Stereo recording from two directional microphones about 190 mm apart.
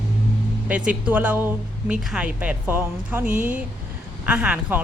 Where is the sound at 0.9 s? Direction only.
10° right (ahead or behind).